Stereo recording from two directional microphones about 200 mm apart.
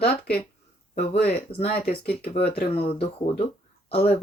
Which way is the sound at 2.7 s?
30° left (ahead or behind).